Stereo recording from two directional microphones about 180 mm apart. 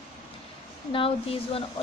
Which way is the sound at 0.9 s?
30° left (ahead or behind).